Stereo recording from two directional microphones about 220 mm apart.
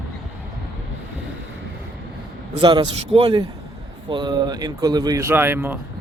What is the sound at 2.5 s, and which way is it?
A man's voice, 20° right (ahead or behind).